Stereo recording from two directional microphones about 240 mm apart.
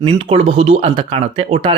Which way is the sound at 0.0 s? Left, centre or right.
Right.